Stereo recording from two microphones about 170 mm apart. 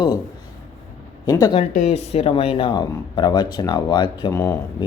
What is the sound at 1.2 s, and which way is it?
Speech, 25° left (ahead or behind).